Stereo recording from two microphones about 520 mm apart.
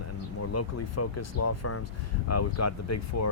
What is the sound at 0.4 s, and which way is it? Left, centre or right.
Speech, left.